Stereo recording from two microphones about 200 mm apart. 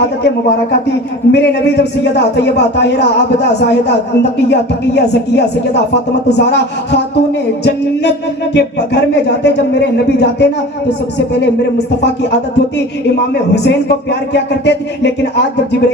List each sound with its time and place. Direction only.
1.3 s a man's voice: 55° left (ahead or behind)
8.5 s a man's voice: 55° left (ahead or behind)
12.0 s a man's voice: 60° left (ahead or behind)